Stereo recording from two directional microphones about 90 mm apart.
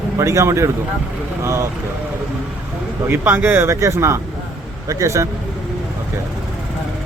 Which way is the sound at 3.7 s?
35° right (ahead or behind).